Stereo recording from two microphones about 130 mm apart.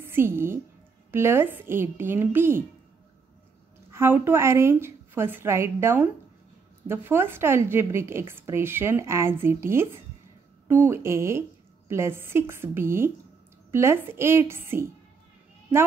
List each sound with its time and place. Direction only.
0.0 s a woman's voice: 20° right (ahead or behind)
3.9 s a woman's voice: 20° right (ahead or behind)